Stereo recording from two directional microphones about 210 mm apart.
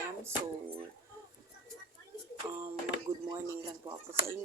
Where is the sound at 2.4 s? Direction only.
10° right (ahead or behind).